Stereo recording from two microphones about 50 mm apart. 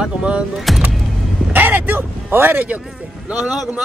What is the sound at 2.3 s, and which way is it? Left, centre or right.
Speech, right.